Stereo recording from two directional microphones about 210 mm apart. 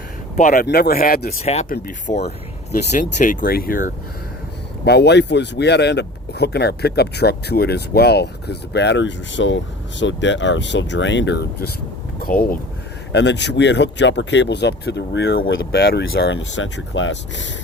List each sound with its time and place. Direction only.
0.3 s speech: 40° left (ahead or behind)
4.9 s speech: 55° left (ahead or behind)
12.2 s speech: 45° left (ahead or behind)
13.1 s speech: 55° left (ahead or behind)